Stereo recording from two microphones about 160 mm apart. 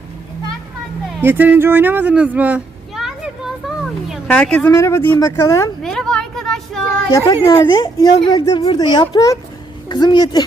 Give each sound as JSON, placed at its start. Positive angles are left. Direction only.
{"t": 1.2, "sound": "speech", "side_deg": -10}
{"t": 4.7, "sound": "speech", "side_deg": 20}
{"t": 5.8, "sound": "a sound", "side_deg": 5}
{"t": 6.8, "sound": "a child's voice", "side_deg": 20}